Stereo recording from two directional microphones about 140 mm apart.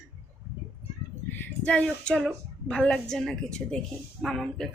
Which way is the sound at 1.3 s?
10° left (ahead or behind).